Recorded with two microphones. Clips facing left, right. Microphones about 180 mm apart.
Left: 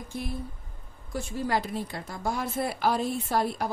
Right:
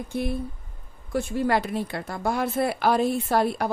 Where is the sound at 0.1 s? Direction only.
60° right (ahead or behind).